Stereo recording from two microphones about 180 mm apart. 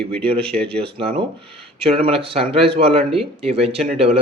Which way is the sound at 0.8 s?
30° right (ahead or behind).